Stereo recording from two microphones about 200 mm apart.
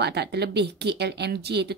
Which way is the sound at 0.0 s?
55° right (ahead or behind).